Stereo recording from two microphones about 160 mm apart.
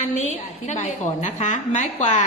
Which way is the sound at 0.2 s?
45° left (ahead or behind).